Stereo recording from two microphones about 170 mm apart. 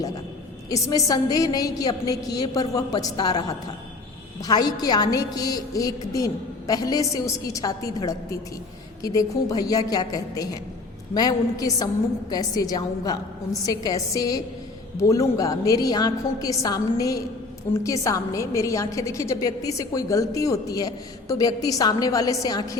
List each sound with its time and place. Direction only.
0.7 s a woman's voice: 20° left (ahead or behind)